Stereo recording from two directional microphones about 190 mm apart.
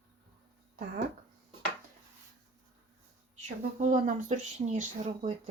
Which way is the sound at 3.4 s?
40° right (ahead or behind).